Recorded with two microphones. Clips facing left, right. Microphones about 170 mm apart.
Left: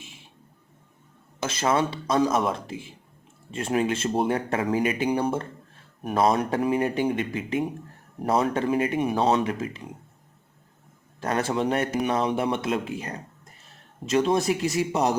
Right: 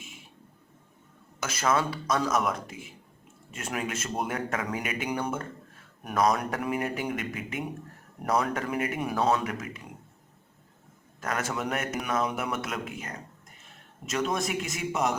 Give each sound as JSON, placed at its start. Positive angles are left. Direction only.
{"t": 1.4, "sound": "speech", "side_deg": 25}
{"t": 11.2, "sound": "a man's voice", "side_deg": 30}